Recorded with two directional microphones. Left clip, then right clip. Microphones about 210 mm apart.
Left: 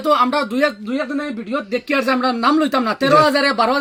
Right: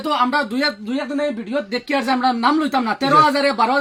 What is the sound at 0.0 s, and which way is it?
Speech, 25° left (ahead or behind).